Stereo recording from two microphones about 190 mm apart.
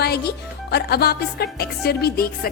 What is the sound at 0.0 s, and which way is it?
A woman's voice, 55° left (ahead or behind).